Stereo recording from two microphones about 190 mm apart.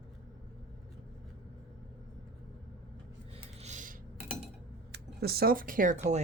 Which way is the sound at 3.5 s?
40° right (ahead or behind).